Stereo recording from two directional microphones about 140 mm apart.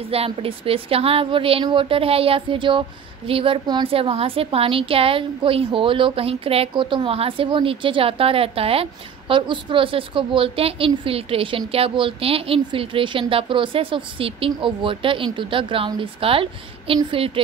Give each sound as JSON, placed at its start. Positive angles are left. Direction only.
{"t": 0.1, "sound": "a woman's voice", "side_deg": -45}